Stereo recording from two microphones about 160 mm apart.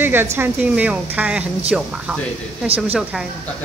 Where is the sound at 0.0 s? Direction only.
15° right (ahead or behind).